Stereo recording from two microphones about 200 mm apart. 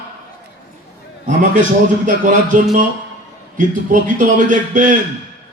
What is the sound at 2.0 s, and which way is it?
A man's voice, 40° right (ahead or behind).